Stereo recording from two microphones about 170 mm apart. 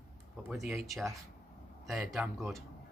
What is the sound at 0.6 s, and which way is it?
Speech, 15° right (ahead or behind).